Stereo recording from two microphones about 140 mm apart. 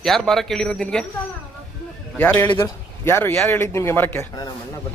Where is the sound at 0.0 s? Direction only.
Centre (ahead or behind).